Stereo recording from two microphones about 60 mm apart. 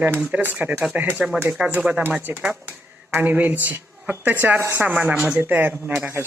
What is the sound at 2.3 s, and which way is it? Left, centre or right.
A woman's voice, right.